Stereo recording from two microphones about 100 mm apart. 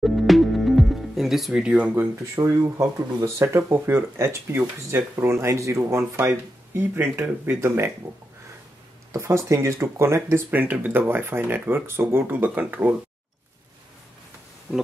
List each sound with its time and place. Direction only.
0.0 s music: centre (ahead or behind)
2.3 s speech: 35° right (ahead or behind)
9.1 s speech: 30° right (ahead or behind)
14.7 s pig: 20° left (ahead or behind)